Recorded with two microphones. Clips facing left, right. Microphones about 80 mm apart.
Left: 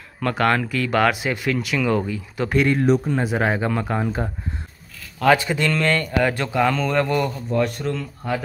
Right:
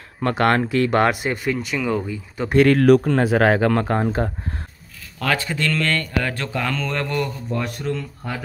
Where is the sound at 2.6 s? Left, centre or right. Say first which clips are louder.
Right 6 dB; right.